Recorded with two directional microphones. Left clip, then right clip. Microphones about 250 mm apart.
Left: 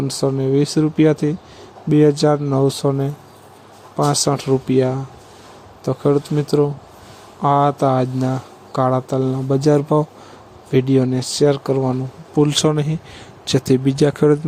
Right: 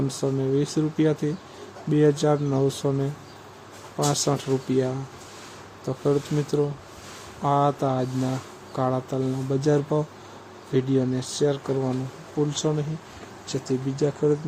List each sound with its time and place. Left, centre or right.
0.1 s speech: left